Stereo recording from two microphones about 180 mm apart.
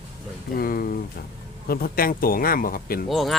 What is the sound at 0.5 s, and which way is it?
Speech, 55° left (ahead or behind).